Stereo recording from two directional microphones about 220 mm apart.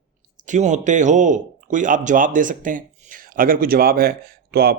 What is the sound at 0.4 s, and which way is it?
Speech, 35° right (ahead or behind).